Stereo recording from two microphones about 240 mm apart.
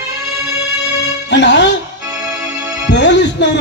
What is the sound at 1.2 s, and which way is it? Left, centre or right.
Speech, left.